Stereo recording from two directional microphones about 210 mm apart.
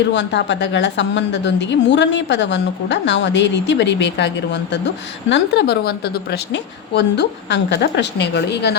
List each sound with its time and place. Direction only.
0.1 s a woman's voice: 55° left (ahead or behind)